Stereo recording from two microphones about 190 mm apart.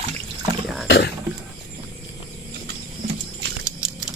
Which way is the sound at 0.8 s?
65° left (ahead or behind).